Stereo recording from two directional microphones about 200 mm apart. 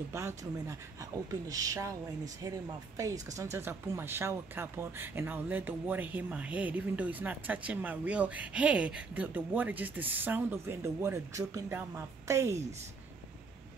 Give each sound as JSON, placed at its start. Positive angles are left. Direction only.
{"t": 0.1, "sound": "speech", "side_deg": -15}